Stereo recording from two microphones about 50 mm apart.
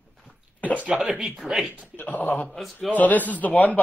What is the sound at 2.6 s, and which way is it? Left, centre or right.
Speech, centre.